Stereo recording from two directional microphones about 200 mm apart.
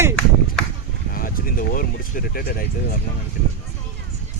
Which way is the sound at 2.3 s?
50° left (ahead or behind).